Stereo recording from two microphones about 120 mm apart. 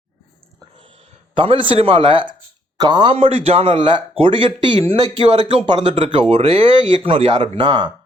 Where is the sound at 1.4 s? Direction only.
45° right (ahead or behind).